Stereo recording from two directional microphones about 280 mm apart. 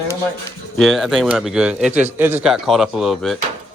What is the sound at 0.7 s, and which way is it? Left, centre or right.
Speech, centre.